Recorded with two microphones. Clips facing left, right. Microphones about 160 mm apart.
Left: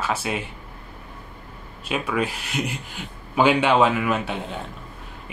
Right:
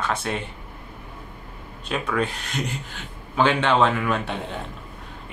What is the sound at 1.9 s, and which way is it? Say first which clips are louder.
A man's voice: even; 5° left (ahead or behind).